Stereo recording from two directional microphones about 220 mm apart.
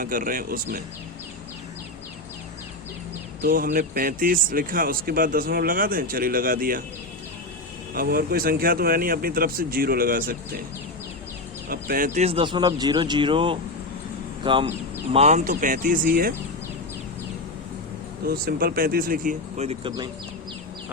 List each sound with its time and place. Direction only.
0.0 s speech: 40° right (ahead or behind)
3.4 s speech: 40° right (ahead or behind)
7.9 s speech: 45° right (ahead or behind)
11.7 s speech: 40° right (ahead or behind)
18.3 s speech: 45° right (ahead or behind); by 20.1 s 25° right (ahead or behind)